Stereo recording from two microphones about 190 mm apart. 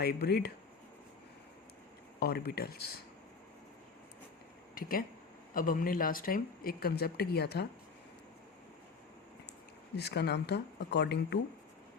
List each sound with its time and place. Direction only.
0.0 s speech: 55° left (ahead or behind)
2.1 s speech: 55° left (ahead or behind)
4.7 s speech: 50° left (ahead or behind)
9.9 s speech: 60° left (ahead or behind)